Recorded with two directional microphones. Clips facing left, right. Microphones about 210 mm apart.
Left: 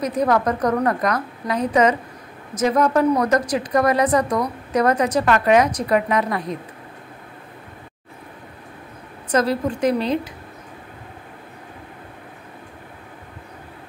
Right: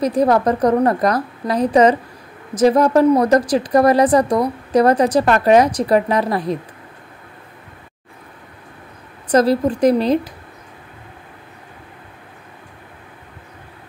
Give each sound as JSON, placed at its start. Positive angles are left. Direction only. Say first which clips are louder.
{"t": 0.0, "sound": "a woman's voice", "louder": "right 4 dB", "side_deg": -30}
{"t": 9.3, "sound": "a woman's voice", "louder": "right 5 dB", "side_deg": -35}